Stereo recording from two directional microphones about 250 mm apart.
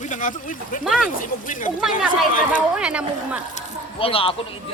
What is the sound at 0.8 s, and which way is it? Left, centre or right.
Speech, centre.